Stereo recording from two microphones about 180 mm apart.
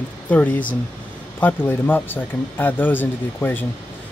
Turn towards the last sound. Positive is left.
turn(degrees=10)  # may be behind; listen again after turning